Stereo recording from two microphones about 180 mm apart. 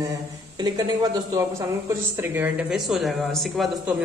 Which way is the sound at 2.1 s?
10° right (ahead or behind).